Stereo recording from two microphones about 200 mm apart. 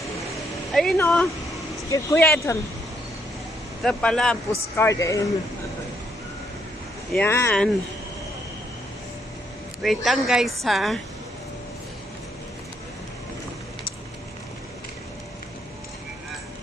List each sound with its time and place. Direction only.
0.7 s speech: centre (ahead or behind)
1.9 s speech: 15° left (ahead or behind)
3.8 s a woman's voice: 5° left (ahead or behind)
4.7 s speech: 15° left (ahead or behind)
7.1 s speech: 10° left (ahead or behind)
9.8 s a woman's voice: centre (ahead or behind)